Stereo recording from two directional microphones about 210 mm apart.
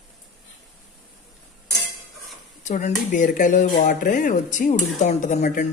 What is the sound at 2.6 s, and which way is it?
Speech, 35° left (ahead or behind).